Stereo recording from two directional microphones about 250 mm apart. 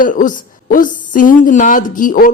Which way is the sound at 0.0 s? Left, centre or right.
Left.